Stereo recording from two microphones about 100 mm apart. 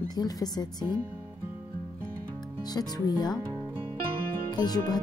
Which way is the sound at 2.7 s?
40° left (ahead or behind).